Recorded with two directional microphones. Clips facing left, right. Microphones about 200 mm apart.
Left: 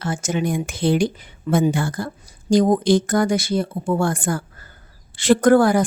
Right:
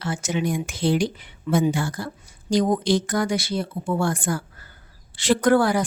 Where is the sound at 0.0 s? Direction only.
45° left (ahead or behind).